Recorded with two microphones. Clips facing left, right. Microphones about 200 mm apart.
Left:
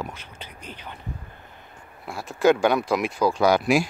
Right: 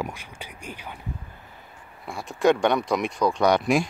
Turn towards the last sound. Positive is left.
turn(degrees=5)  # may be behind; listen again after turning